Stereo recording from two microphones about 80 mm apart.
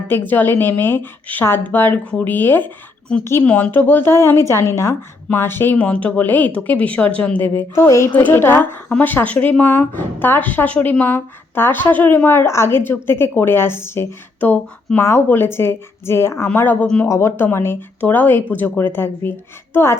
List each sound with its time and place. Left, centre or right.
0.1 s a woman's voice: left
7.9 s a woman's voice: left
16.8 s speech: centre
17.1 s a woman's voice: left